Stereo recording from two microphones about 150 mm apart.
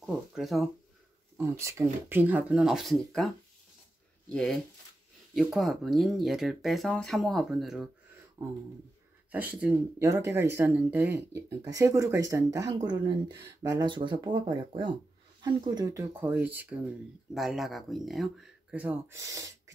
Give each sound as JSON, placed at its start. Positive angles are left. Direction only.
{"t": 0.0, "sound": "speech", "side_deg": 0}
{"t": 1.4, "sound": "speech", "side_deg": -20}
{"t": 4.3, "sound": "speech", "side_deg": 5}
{"t": 8.4, "sound": "speech", "side_deg": -20}
{"t": 9.3, "sound": "speech", "side_deg": -10}
{"t": 16.1, "sound": "speech", "side_deg": -10}
{"t": 17.3, "sound": "speech", "side_deg": 0}